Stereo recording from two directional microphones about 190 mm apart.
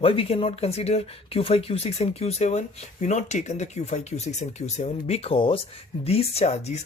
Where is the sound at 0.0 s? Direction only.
30° left (ahead or behind).